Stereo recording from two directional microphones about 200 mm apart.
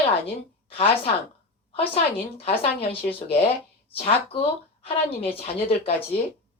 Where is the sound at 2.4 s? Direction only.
30° left (ahead or behind).